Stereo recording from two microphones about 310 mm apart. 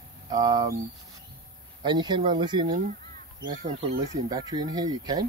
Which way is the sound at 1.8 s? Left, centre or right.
Centre.